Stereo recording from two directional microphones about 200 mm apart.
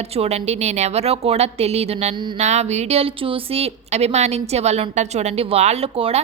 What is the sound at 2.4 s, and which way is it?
A woman's voice, 35° right (ahead or behind).